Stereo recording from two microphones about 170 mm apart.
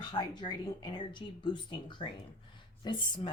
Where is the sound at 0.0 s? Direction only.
25° left (ahead or behind).